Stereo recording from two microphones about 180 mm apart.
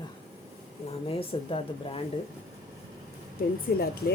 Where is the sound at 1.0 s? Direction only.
30° left (ahead or behind).